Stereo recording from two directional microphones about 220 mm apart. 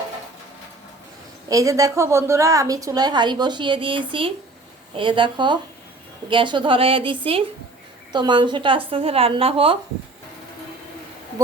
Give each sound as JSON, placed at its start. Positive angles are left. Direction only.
{"t": 1.5, "sound": "a woman's voice", "side_deg": -15}